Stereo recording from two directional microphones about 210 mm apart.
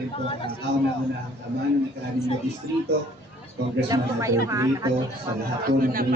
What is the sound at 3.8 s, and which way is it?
Speech, 15° right (ahead or behind).